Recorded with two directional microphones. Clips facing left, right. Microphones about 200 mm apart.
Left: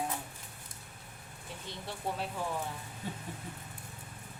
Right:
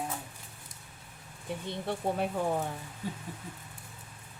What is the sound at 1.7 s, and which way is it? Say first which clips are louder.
Speech: right 6 dB; 55° right (ahead or behind).